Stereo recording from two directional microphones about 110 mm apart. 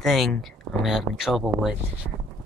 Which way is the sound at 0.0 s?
Centre (ahead or behind).